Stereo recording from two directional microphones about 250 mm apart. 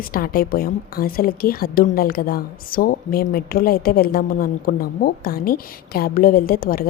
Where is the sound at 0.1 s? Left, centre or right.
Left.